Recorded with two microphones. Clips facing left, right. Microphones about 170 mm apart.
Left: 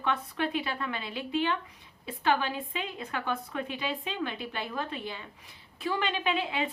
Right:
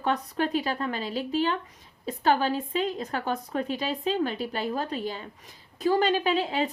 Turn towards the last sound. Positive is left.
turn(degrees=-40)  # may be behind; listen again after turning